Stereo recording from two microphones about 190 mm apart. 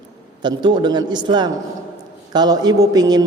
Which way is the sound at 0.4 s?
25° right (ahead or behind).